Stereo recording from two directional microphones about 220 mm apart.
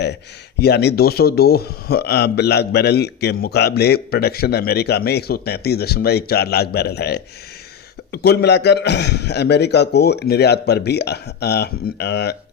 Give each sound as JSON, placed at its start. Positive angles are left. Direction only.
{"t": 0.6, "sound": "a man's voice", "side_deg": 50}